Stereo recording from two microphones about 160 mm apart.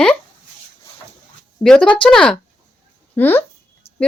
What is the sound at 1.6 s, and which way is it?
Speech, 5° left (ahead or behind).